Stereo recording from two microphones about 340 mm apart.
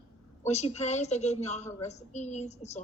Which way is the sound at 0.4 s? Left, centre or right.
Centre.